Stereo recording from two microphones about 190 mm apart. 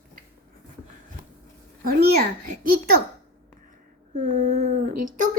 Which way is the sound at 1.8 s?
55° right (ahead or behind).